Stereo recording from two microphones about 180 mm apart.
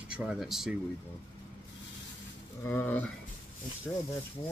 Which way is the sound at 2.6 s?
10° left (ahead or behind).